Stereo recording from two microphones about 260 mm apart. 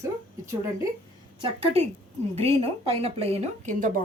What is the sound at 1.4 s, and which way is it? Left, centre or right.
A woman's voice, right.